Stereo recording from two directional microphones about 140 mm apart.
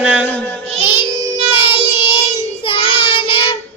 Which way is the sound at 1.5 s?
40° left (ahead or behind).